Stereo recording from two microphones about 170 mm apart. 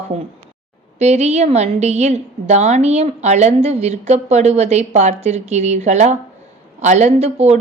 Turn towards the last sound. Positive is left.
turn(degrees=-40)  # may be behind; listen again after turning